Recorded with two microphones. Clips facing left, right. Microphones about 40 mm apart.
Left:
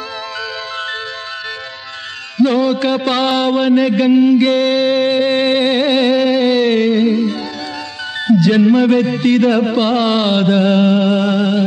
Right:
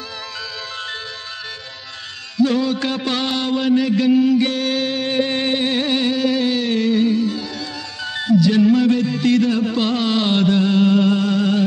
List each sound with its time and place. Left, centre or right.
2.3 s music: left
6.3 s a sound: left
6.9 s music: left
8.4 s music: left
9.8 s music: left
10.6 s music: left
10.9 s music: left